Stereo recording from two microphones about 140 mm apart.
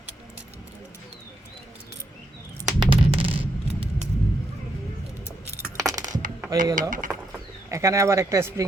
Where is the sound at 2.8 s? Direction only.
40° right (ahead or behind).